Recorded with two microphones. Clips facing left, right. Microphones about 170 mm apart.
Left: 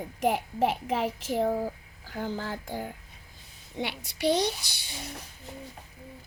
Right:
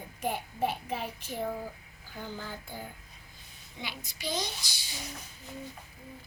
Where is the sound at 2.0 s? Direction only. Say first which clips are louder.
Left 7 dB; 85° left.